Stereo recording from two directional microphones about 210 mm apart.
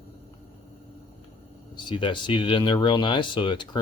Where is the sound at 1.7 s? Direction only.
25° left (ahead or behind).